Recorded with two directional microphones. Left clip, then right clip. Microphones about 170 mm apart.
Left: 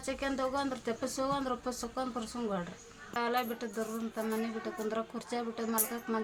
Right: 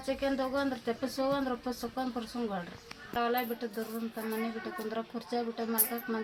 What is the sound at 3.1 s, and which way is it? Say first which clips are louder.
Speech: right 1 dB; 20° left (ahead or behind).